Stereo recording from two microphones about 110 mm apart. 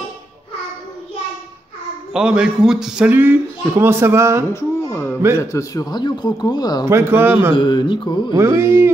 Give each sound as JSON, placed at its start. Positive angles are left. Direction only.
{"t": 2.1, "sound": "a man's voice", "side_deg": -5}
{"t": 3.1, "sound": "speech", "side_deg": -20}
{"t": 4.6, "sound": "speech", "side_deg": 25}
{"t": 6.9, "sound": "speech", "side_deg": -20}
{"t": 7.5, "sound": "a sound", "side_deg": 45}
{"t": 8.4, "sound": "speech", "side_deg": -25}